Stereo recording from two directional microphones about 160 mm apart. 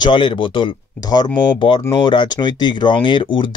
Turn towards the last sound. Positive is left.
turn(degrees=30)  # may be behind; listen again after turning